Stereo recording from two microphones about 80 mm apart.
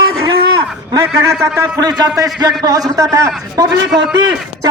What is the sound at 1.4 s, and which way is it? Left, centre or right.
A man's voice, right.